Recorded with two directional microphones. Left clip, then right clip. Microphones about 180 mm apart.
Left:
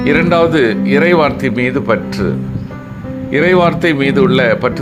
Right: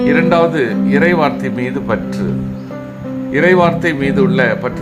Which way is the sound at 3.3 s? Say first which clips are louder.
Even; 25° left (ahead or behind).